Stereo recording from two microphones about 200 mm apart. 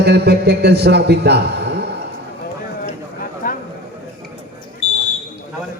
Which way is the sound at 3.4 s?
45° left (ahead or behind).